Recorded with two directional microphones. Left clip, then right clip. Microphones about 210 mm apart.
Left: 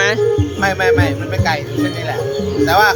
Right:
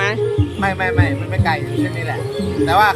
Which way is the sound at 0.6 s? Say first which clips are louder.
Left 5 dB; 5° left (ahead or behind).